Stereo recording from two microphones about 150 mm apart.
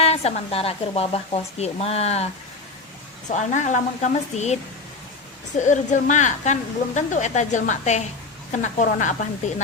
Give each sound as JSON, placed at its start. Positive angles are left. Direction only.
{"t": 0.0, "sound": "speech", "side_deg": 45}
{"t": 3.2, "sound": "speech", "side_deg": 55}
{"t": 5.5, "sound": "a woman's voice", "side_deg": 55}